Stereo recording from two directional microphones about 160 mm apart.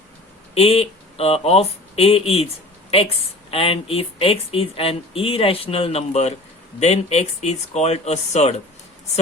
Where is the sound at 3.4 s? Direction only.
35° left (ahead or behind).